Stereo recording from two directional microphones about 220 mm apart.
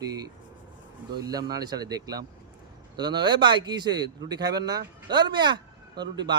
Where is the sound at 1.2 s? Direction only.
15° right (ahead or behind).